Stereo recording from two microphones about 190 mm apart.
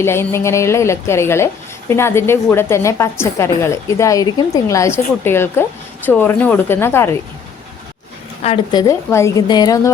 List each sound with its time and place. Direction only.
0.0 s a woman's voice: 15° left (ahead or behind)
8.4 s a woman's voice: 25° left (ahead or behind)